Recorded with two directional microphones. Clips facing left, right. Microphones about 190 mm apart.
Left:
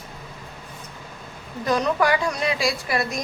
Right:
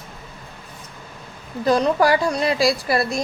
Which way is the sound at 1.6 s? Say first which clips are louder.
Right 4 dB; 30° right (ahead or behind).